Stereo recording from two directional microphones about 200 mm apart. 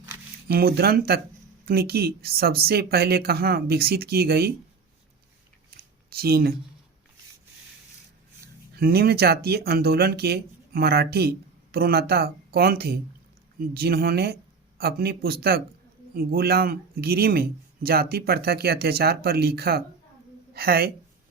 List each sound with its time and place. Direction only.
0.4 s speech: 50° right (ahead or behind)
6.1 s speech: 50° right (ahead or behind)
8.8 s speech: 50° right (ahead or behind)